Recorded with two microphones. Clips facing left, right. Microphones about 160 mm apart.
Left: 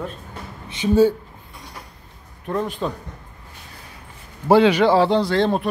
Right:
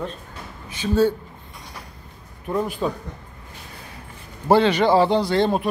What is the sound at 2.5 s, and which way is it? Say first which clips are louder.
Speech: right 1 dB; 5° right (ahead or behind).